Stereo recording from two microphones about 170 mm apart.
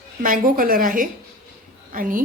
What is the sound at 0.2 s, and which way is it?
A woman's voice, 55° right (ahead or behind).